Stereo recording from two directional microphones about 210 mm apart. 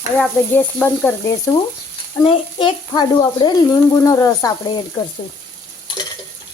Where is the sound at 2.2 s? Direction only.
25° left (ahead or behind).